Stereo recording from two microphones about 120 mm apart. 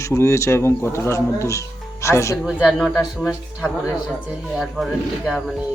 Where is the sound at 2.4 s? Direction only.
5° right (ahead or behind).